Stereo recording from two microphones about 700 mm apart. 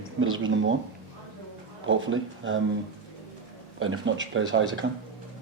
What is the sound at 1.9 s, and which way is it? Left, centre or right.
Speech, centre.